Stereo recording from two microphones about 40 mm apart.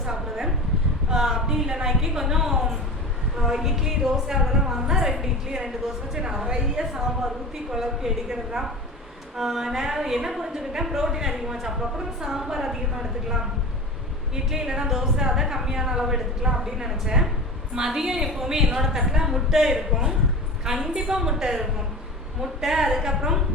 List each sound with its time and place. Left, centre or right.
0.0 s a sound: centre
3.3 s a woman's voice: centre
14.5 s a woman's voice: centre